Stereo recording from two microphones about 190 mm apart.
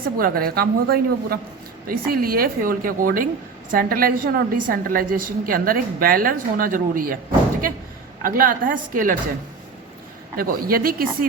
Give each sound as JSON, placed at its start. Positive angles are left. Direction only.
{"t": 0.2, "sound": "a woman's voice", "side_deg": -50}
{"t": 8.2, "sound": "a woman's voice", "side_deg": -50}
{"t": 10.3, "sound": "a woman's voice", "side_deg": -50}